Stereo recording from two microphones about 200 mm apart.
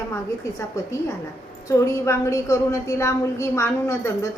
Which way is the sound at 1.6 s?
15° left (ahead or behind).